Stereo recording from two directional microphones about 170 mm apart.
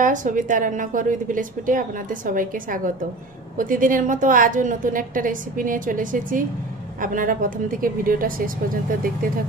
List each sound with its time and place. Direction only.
0.0 s a woman's voice: 50° right (ahead or behind)